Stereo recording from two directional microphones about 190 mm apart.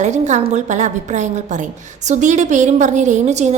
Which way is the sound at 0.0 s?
40° right (ahead or behind).